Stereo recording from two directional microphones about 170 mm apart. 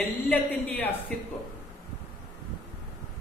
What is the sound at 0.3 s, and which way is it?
Speech, 10° left (ahead or behind).